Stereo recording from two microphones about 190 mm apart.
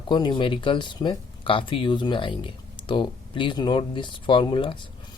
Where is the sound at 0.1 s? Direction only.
25° left (ahead or behind).